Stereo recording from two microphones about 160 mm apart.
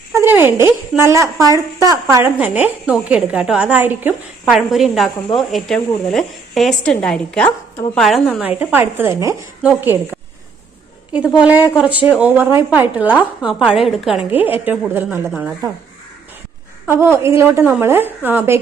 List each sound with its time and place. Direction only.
0.1 s a woman's voice: 15° right (ahead or behind)
2.4 s a woman's voice: 10° right (ahead or behind)
11.3 s a woman's voice: 10° right (ahead or behind)
16.8 s a woman's voice: 15° right (ahead or behind)